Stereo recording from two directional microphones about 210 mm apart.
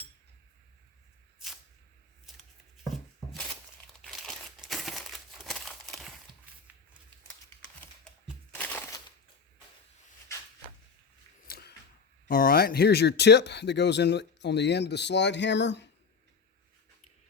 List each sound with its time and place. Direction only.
4.0 s crumpling: centre (ahead or behind)
8.5 s crushing: 10° left (ahead or behind)
11.4 s a sound: 45° left (ahead or behind)
12.3 s speech: 45° left (ahead or behind)